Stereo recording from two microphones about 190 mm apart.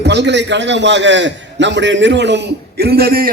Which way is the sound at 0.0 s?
65° right (ahead or behind).